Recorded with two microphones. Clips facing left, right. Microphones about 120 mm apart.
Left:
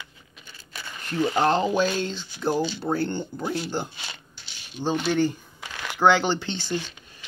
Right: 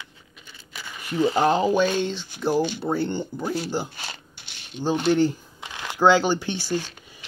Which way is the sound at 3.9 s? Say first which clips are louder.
Right 3 dB; 40° right (ahead or behind).